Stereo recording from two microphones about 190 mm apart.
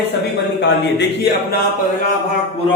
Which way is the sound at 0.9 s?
60° left (ahead or behind).